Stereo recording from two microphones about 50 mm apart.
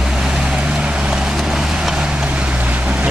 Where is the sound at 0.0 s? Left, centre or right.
Centre.